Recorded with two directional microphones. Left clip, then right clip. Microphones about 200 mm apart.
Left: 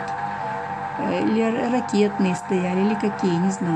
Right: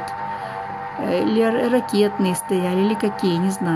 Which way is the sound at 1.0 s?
15° right (ahead or behind).